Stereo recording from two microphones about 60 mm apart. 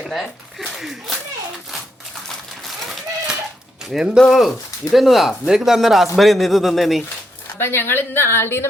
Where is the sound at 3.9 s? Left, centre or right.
Centre.